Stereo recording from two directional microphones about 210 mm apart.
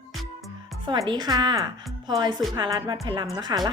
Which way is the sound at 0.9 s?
20° right (ahead or behind).